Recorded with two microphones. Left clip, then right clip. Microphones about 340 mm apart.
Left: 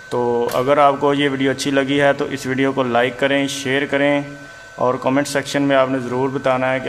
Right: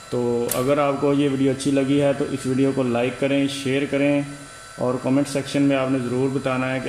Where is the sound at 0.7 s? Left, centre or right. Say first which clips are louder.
Left 6 dB; left.